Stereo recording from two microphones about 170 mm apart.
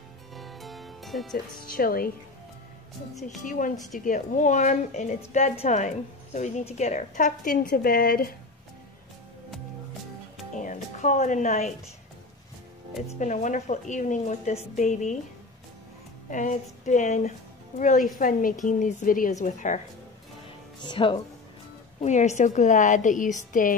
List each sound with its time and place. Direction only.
0.3 s music: centre (ahead or behind)
1.3 s speech: 60° left (ahead or behind)
3.3 s a woman's voice: 50° left (ahead or behind)
10.6 s music: 50° left (ahead or behind)
13.2 s a woman's voice: 45° left (ahead or behind)
16.3 s a woman's voice: 45° left (ahead or behind)
20.8 s speech: 30° left (ahead or behind)
22.0 s a woman's voice: 45° left (ahead or behind)